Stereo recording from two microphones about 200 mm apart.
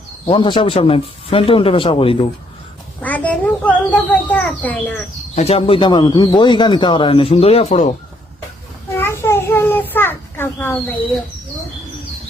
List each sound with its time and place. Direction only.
0.3 s a man's voice: 25° left (ahead or behind)
3.0 s a child's voice: 10° left (ahead or behind)
5.3 s a man's voice: 30° left (ahead or behind)
9.0 s a sound: 10° left (ahead or behind)